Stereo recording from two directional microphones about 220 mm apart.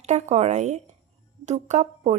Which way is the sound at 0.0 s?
30° right (ahead or behind).